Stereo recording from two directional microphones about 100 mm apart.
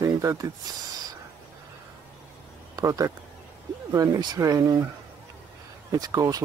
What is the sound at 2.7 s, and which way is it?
Speech, 35° right (ahead or behind).